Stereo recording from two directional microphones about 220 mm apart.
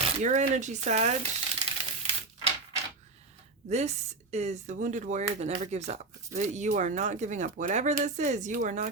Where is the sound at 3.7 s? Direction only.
30° right (ahead or behind).